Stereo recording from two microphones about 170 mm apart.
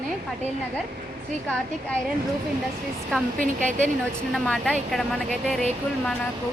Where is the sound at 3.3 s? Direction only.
50° right (ahead or behind).